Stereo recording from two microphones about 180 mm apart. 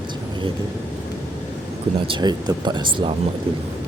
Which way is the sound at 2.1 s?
25° right (ahead or behind).